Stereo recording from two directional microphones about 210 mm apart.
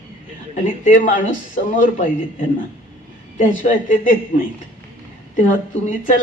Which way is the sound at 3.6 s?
40° left (ahead or behind).